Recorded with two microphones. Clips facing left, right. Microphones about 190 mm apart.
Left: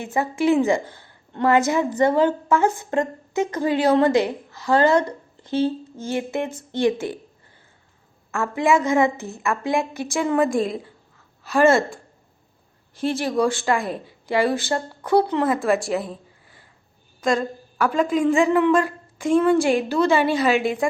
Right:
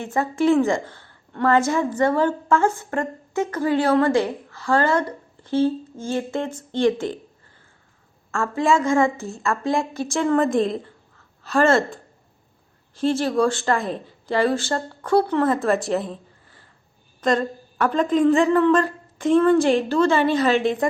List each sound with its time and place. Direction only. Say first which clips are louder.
0.0 s a woman's voice: right 1 dB; 15° left (ahead or behind)
8.3 s a woman's voice: even; 15° left (ahead or behind)
13.0 s a woman's voice: right 2 dB; 15° left (ahead or behind)
15.9 s a sound: right 1 dB; 5° left (ahead or behind)
17.2 s a woman's voice: right 1 dB; 10° left (ahead or behind)